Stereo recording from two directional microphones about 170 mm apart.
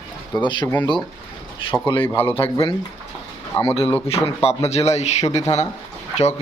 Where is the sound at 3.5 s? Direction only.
30° left (ahead or behind).